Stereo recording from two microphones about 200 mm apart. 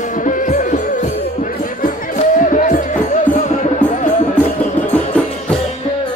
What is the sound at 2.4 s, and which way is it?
Music, 40° left (ahead or behind).